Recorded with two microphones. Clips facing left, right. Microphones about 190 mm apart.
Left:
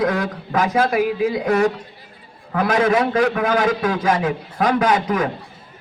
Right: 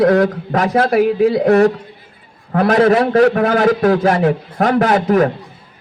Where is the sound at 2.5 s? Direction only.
40° right (ahead or behind).